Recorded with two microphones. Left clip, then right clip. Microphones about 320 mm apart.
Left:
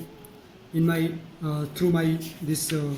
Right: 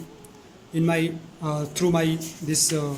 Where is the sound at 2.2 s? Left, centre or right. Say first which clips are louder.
Right 5 dB; centre.